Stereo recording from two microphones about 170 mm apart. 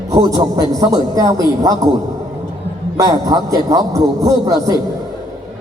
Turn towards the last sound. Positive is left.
turn(degrees=-20)  # may be behind; listen again after turning